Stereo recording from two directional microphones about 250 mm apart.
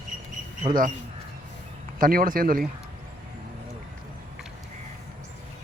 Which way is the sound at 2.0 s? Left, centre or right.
Right.